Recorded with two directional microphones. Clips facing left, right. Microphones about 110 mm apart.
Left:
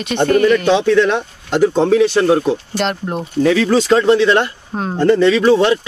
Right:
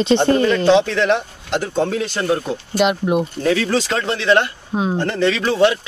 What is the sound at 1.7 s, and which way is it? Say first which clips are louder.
Speech: left 7 dB; 90° left.